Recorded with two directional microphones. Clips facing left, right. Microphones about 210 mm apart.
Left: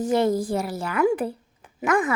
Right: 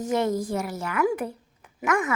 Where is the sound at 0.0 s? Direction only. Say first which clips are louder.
Left 3 dB; 30° left (ahead or behind).